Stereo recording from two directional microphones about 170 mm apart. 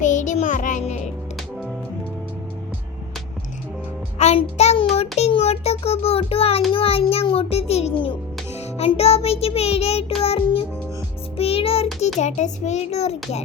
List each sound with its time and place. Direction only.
0.0 s music: 45° left (ahead or behind)
4.2 s a sound: 40° left (ahead or behind)
6.7 s music: 35° left (ahead or behind)
12.2 s a child's voice: 45° left (ahead or behind)